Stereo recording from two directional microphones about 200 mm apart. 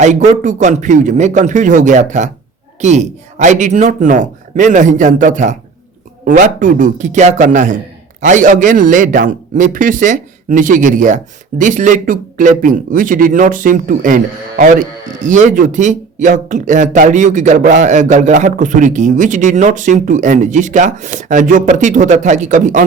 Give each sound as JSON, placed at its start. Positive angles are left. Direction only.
{"t": 0.0, "sound": "speech", "side_deg": -35}